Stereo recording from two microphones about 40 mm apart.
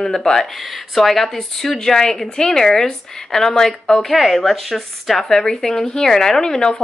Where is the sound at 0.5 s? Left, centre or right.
Centre.